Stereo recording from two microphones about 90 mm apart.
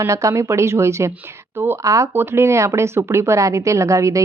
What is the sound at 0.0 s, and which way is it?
Speech, 35° right (ahead or behind).